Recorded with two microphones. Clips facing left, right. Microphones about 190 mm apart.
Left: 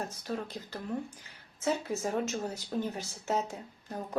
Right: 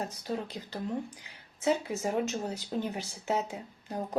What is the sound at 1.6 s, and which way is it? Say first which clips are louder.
A woman's voice: right 2 dB; 15° right (ahead or behind).